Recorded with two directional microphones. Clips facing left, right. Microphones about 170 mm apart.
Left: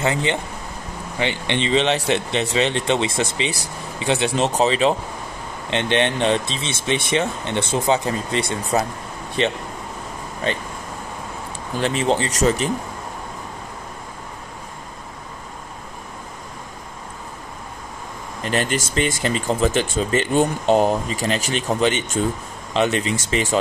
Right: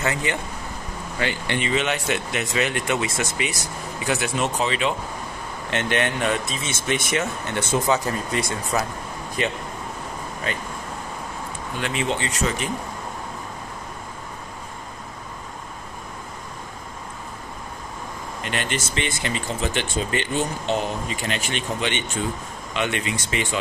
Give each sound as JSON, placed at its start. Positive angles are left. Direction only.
{"t": 0.0, "sound": "speech", "side_deg": 25}
{"t": 5.7, "sound": "speech", "side_deg": 20}
{"t": 11.8, "sound": "speech", "side_deg": 35}
{"t": 18.4, "sound": "speech", "side_deg": 40}